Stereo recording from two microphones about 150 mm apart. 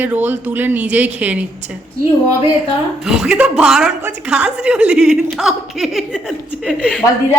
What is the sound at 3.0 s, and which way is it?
A woman's voice, 5° right (ahead or behind).